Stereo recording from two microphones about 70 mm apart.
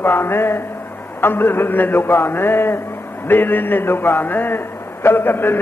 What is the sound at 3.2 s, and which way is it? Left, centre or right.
A man's voice, left.